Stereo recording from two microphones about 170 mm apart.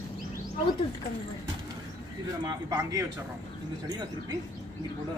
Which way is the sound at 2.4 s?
20° right (ahead or behind).